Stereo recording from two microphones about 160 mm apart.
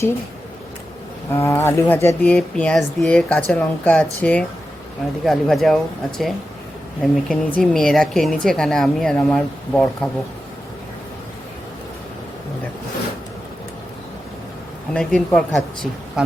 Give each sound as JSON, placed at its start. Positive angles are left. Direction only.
{"t": 1.3, "sound": "speech", "side_deg": 15}
{"t": 14.9, "sound": "speech", "side_deg": 5}